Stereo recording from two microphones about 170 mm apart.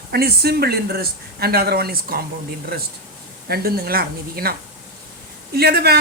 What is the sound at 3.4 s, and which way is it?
Speech, 65° right (ahead or behind).